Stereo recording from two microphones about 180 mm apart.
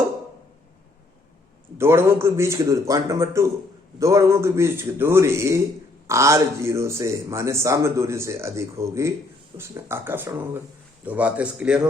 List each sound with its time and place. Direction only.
1.8 s speech: 15° right (ahead or behind)